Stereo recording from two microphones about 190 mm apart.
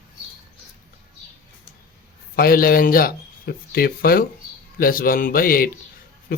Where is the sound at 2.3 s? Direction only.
50° left (ahead or behind).